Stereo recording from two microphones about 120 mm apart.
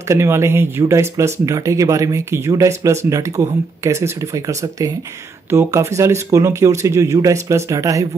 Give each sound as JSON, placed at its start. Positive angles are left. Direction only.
{"t": 0.1, "sound": "speech", "side_deg": -20}